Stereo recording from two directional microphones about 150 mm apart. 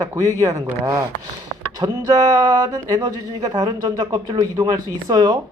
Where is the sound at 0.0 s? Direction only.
20° right (ahead or behind).